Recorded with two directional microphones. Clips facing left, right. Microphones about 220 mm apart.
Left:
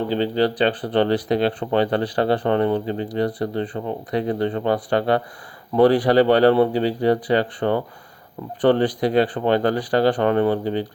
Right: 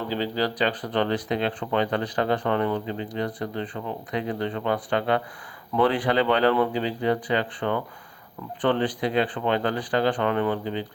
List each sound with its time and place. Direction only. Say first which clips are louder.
0.1 s speech: left 5 dB; 30° left (ahead or behind)